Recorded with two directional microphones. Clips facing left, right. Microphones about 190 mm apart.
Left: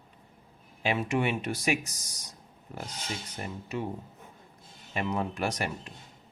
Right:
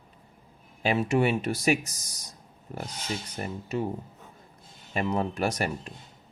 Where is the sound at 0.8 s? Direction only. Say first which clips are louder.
Right 4 dB; 40° right (ahead or behind).